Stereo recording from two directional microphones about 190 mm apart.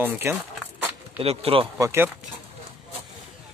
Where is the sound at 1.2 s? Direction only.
30° right (ahead or behind).